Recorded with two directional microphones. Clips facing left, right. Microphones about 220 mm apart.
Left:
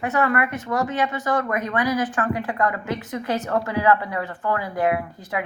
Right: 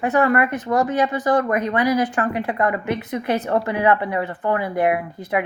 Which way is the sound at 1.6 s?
20° right (ahead or behind).